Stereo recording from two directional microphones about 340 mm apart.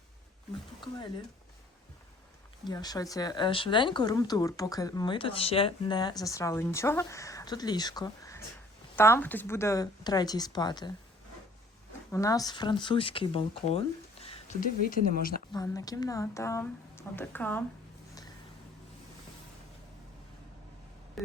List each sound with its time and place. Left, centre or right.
0.8 s speech: centre
2.6 s speech: centre
12.1 s speech: centre
15.5 s speech: centre